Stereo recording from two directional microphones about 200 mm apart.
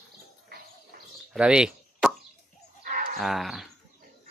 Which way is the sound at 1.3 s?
5° right (ahead or behind).